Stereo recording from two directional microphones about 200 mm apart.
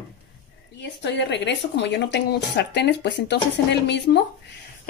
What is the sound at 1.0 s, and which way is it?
Speech, 60° left (ahead or behind).